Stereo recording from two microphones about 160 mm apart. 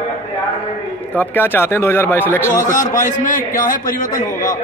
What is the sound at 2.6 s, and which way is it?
A man's voice, 55° left (ahead or behind).